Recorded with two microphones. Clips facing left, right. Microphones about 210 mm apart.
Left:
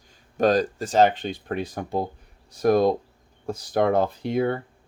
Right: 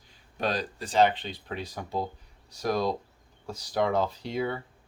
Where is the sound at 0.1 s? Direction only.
45° left (ahead or behind).